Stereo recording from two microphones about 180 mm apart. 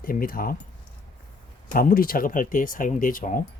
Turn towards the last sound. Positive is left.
turn(degrees=50)  # may be behind; listen again after turning